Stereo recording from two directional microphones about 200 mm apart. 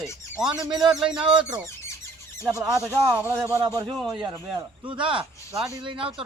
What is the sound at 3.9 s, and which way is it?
Speech, centre (ahead or behind).